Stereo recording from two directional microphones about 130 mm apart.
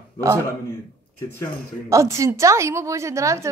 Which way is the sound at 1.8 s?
25° right (ahead or behind).